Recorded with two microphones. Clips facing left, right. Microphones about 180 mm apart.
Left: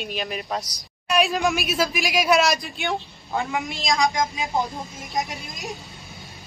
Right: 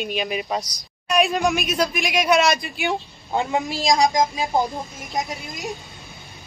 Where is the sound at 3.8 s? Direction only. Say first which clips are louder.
Right 4 dB; 35° right (ahead or behind).